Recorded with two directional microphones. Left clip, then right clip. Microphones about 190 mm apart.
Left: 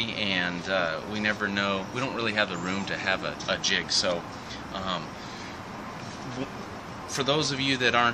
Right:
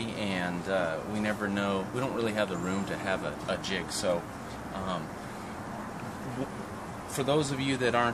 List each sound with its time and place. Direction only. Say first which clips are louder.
0.0 s speech: left 6 dB; 25° right (ahead or behind)
7.2 s speech: left 3 dB; 20° right (ahead or behind)